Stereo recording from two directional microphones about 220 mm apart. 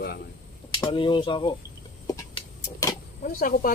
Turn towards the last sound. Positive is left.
turn(degrees=40)  # may be behind; listen again after turning